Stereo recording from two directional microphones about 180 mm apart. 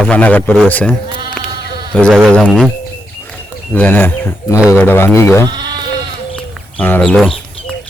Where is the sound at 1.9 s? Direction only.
Centre (ahead or behind).